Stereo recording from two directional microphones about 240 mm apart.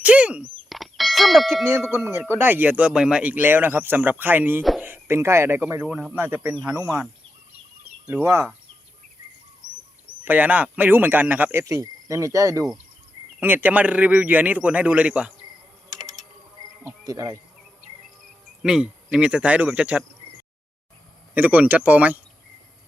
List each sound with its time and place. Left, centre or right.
0.0 s a sound: centre
0.7 s clang: centre
2.3 s speech: centre
9.6 s a sound: right
10.2 s speech: centre
16.0 s typing: centre
16.8 s a sound: centre
18.6 s speech: centre
21.3 s speech: centre